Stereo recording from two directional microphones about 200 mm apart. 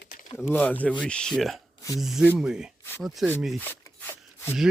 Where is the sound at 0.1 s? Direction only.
45° left (ahead or behind).